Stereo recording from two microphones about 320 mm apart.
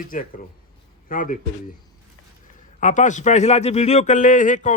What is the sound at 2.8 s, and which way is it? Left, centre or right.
A man's voice, left.